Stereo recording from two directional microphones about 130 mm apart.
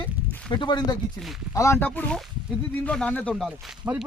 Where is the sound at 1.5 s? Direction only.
20° left (ahead or behind); by 3.5 s 5° left (ahead or behind).